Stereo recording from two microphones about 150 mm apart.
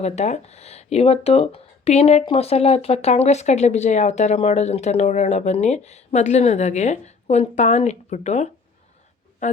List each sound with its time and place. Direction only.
0.0 s speech: 45° left (ahead or behind)